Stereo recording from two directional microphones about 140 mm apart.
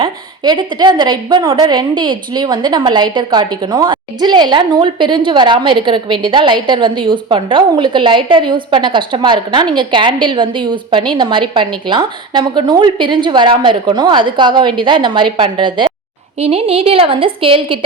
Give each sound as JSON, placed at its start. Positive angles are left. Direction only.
{"t": 0.0, "sound": "a woman's voice", "side_deg": -35}